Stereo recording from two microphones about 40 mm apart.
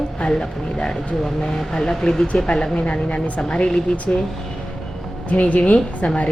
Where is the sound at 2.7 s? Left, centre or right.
Left.